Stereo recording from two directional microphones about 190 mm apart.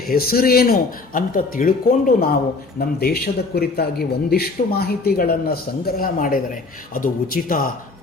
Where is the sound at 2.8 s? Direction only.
55° left (ahead or behind).